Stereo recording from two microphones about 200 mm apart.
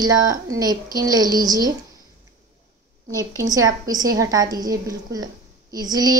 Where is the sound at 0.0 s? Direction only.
20° right (ahead or behind).